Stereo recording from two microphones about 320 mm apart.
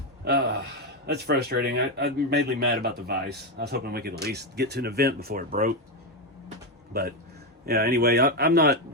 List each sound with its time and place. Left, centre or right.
0.3 s speech: right
6.9 s speech: right